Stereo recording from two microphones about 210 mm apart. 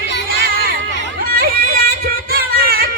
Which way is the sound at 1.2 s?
45° right (ahead or behind).